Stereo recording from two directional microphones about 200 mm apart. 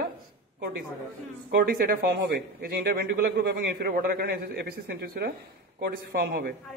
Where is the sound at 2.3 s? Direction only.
55° right (ahead or behind).